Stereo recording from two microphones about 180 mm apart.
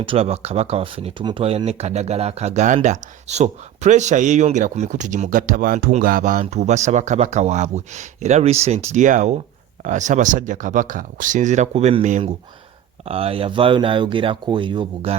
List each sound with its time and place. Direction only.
0.0 s speech: 30° right (ahead or behind)